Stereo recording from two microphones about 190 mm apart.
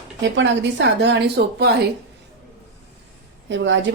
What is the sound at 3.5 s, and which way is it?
Speech, 75° right (ahead or behind).